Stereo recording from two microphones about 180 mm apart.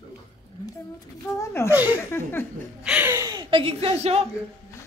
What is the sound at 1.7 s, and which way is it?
Speech, 10° right (ahead or behind).